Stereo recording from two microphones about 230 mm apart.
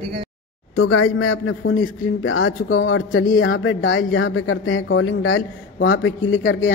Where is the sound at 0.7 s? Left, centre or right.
Left.